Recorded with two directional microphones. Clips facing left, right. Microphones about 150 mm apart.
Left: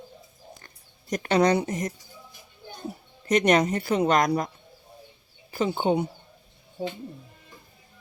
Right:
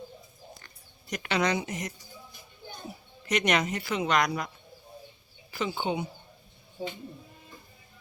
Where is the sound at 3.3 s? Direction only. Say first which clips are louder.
Left 6 dB; 45° left (ahead or behind).